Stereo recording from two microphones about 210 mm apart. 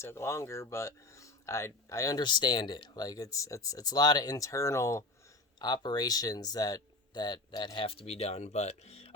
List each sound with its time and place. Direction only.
0.0 s speech: 10° left (ahead or behind); by 9.1 s 30° left (ahead or behind)